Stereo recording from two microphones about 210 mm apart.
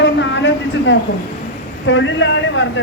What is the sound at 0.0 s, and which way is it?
Vehicle, 60° left (ahead or behind).